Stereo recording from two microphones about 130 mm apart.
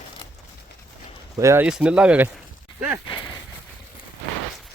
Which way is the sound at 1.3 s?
20° right (ahead or behind).